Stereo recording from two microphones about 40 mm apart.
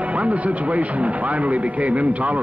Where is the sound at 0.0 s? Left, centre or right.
Right.